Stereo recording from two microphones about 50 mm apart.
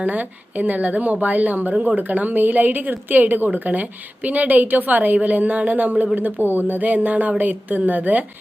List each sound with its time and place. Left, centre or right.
0.0 s a woman's voice: right